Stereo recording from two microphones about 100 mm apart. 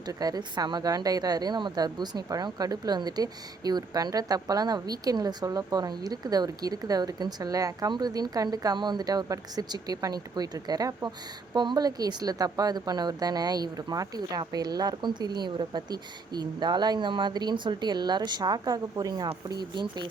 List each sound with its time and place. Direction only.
0.1 s a woman's voice: 40° right (ahead or behind)